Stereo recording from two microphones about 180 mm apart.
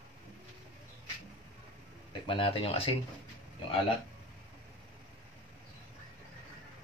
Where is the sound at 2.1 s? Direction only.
30° left (ahead or behind).